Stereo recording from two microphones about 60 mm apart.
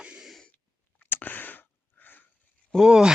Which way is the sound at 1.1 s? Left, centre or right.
Left.